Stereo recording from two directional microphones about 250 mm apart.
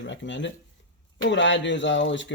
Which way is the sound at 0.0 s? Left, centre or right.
Left.